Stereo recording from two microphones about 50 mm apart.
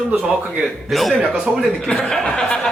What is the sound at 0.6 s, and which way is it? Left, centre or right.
A man's voice, centre.